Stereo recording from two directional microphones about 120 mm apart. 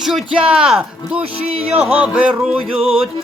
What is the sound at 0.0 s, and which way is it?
Music, 5° right (ahead or behind).